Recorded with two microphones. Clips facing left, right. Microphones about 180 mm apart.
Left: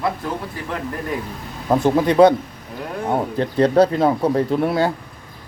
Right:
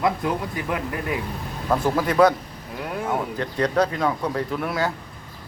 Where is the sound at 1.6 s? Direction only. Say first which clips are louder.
Left 5 dB; 25° left (ahead or behind).